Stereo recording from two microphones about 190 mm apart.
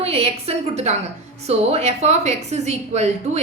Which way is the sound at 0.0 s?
30° right (ahead or behind).